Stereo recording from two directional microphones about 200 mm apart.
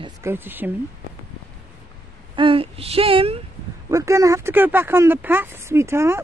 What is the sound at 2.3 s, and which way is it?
Speech, 25° right (ahead or behind).